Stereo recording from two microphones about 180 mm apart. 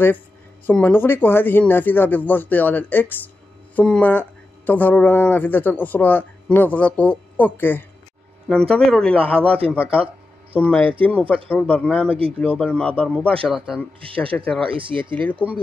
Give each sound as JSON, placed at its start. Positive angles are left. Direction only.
{"t": 0.7, "sound": "a man's voice", "side_deg": 10}
{"t": 10.6, "sound": "speech", "side_deg": 5}
{"t": 12.1, "sound": "speech", "side_deg": -30}
{"t": 12.4, "sound": "a man's voice", "side_deg": 5}
{"t": 14.0, "sound": "speech", "side_deg": -30}
{"t": 14.3, "sound": "a man's voice", "side_deg": 5}
{"t": 14.7, "sound": "speech", "side_deg": -30}
{"t": 15.1, "sound": "speech", "side_deg": 10}